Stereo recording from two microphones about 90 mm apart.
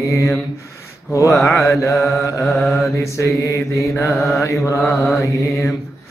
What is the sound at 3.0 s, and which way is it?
Mantra, 35° left (ahead or behind).